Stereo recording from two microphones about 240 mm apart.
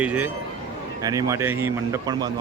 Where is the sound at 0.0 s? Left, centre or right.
Centre.